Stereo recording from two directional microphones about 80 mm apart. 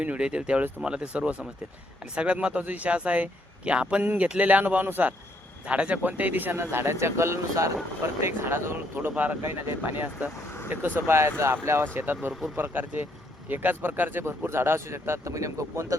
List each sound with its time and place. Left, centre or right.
0.0 s a man's voice: centre
4.0 s speech: right